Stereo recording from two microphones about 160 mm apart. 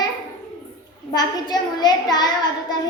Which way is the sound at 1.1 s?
25° left (ahead or behind).